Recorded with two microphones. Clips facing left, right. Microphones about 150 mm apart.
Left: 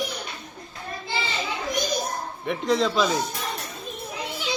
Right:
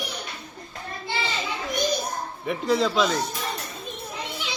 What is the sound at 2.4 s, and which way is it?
Speech, centre (ahead or behind).